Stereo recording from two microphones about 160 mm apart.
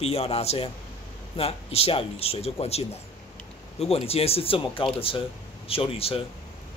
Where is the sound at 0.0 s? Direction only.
40° left (ahead or behind).